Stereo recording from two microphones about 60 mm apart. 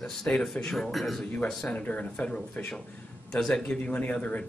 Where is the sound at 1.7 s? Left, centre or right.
Left.